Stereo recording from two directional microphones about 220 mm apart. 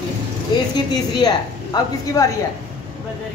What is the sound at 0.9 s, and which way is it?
A woman's voice, 20° left (ahead or behind).